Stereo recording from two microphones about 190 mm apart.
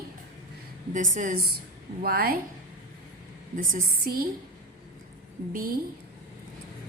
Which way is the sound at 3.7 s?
50° right (ahead or behind).